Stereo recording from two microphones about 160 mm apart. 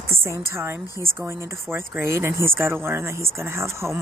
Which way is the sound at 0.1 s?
15° right (ahead or behind).